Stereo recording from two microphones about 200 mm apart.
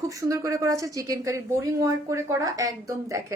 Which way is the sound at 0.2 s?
15° right (ahead or behind).